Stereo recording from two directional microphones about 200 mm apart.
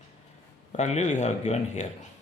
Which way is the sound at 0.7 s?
35° left (ahead or behind).